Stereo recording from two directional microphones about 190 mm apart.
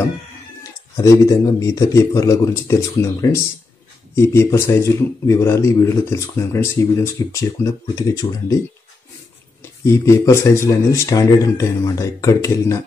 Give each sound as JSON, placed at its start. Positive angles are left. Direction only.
{"t": 0.9, "sound": "speech", "side_deg": 15}
{"t": 9.8, "sound": "speech", "side_deg": 15}